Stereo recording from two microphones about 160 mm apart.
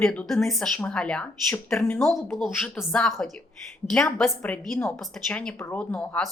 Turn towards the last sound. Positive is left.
turn(degrees=5)  # may be behind; listen again after turning